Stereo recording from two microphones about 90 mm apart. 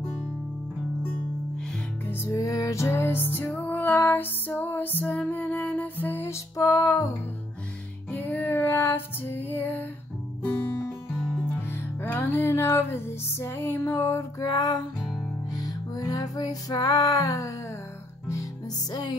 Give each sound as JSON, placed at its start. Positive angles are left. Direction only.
{"t": 2.0, "sound": "music", "side_deg": 30}
{"t": 6.5, "sound": "music", "side_deg": 40}
{"t": 8.1, "sound": "music", "side_deg": 20}
{"t": 12.0, "sound": "music", "side_deg": 25}
{"t": 14.4, "sound": "music", "side_deg": 50}
{"t": 18.9, "sound": "music", "side_deg": 55}